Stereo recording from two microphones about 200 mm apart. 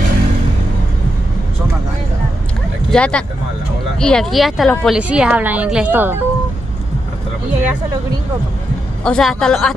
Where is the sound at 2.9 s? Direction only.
5° left (ahead or behind).